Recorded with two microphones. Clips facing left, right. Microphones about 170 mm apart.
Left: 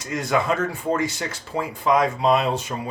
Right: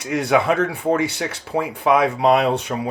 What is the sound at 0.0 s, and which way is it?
Speech, 65° right (ahead or behind).